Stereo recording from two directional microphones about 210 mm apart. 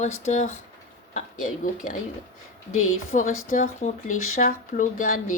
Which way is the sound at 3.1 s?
35° left (ahead or behind).